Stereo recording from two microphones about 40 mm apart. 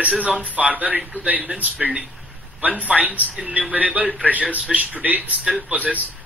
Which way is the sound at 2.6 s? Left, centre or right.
Right.